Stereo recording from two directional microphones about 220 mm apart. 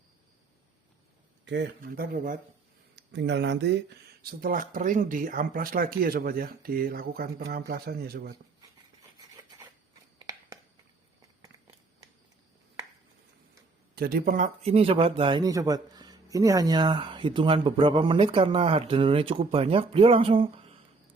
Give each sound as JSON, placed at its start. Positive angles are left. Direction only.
{"t": 1.5, "sound": "speech", "side_deg": -55}
{"t": 2.9, "sound": "speech", "side_deg": -50}
{"t": 10.2, "sound": "a sound", "side_deg": -15}
{"t": 13.9, "sound": "a man's voice", "side_deg": -45}